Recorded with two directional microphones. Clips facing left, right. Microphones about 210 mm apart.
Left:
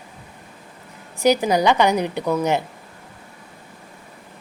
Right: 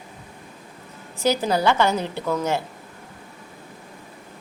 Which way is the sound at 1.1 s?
15° left (ahead or behind).